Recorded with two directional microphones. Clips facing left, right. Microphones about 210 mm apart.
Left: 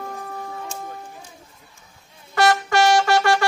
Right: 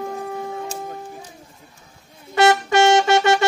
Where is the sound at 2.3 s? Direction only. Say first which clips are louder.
Right 3 dB; 20° right (ahead or behind).